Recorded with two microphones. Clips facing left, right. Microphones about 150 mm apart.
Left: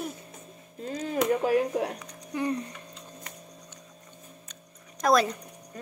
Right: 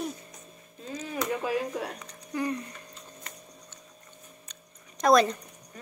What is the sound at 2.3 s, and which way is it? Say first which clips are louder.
Speech: left 1 dB; 20° left (ahead or behind).